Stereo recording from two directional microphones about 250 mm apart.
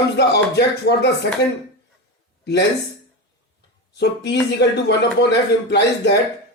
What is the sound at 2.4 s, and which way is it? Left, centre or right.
Speech, left.